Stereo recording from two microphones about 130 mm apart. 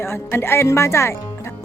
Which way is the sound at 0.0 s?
20° left (ahead or behind).